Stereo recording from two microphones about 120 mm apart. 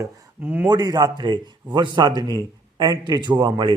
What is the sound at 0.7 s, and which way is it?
Speech, 35° right (ahead or behind).